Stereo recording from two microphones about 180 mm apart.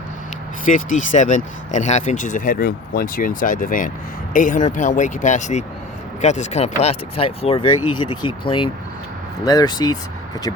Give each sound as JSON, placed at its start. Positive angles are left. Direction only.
{"t": 0.6, "sound": "speech", "side_deg": 45}